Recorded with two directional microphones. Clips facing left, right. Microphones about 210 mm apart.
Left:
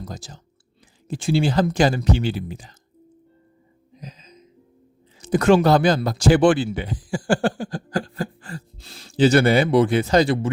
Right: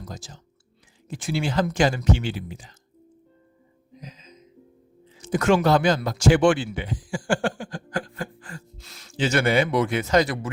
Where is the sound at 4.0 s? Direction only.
35° left (ahead or behind).